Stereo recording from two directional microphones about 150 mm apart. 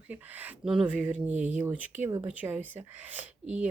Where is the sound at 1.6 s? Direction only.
10° right (ahead or behind).